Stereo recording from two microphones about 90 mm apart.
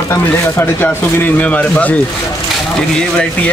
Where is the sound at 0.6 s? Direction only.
25° left (ahead or behind).